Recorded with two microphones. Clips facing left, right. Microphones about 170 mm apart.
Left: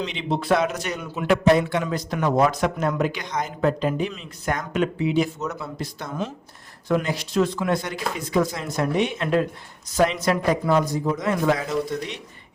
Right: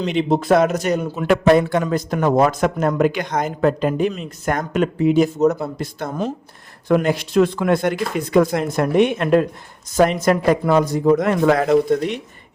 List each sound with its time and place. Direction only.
0.0 s a man's voice: 45° right (ahead or behind)